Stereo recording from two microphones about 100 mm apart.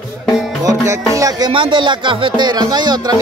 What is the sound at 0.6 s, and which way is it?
Music, 35° right (ahead or behind).